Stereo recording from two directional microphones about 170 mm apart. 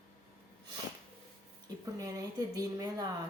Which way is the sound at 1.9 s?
20° right (ahead or behind).